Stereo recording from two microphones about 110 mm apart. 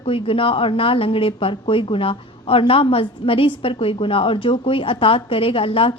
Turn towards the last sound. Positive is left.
turn(degrees=55)  # may be behind; listen again after turning